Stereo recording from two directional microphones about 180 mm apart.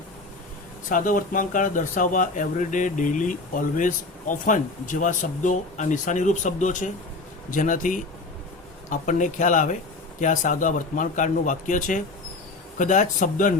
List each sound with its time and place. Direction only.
0.9 s speech: 50° left (ahead or behind)